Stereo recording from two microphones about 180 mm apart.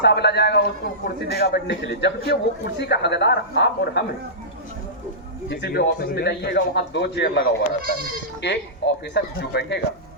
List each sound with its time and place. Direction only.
0.0 s a man's voice: 70° left (ahead or behind)
5.5 s a man's voice: 65° left (ahead or behind)
8.4 s a man's voice: 75° left (ahead or behind)